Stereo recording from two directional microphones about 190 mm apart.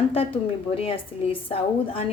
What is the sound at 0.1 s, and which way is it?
A woman's voice, 30° left (ahead or behind).